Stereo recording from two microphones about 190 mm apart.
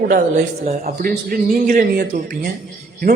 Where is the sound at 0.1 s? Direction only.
40° right (ahead or behind).